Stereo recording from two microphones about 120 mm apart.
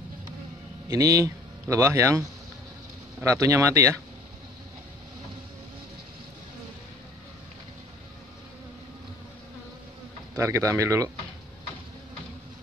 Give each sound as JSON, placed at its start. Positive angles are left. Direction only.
{"t": 0.8, "sound": "a man's voice", "side_deg": -30}
{"t": 3.3, "sound": "speech", "side_deg": -25}
{"t": 10.3, "sound": "speech", "side_deg": -25}